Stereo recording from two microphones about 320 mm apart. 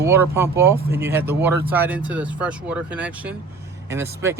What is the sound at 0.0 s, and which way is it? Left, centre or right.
Speech, centre.